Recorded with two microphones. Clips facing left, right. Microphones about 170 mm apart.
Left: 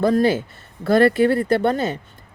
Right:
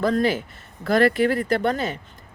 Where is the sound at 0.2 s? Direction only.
25° left (ahead or behind).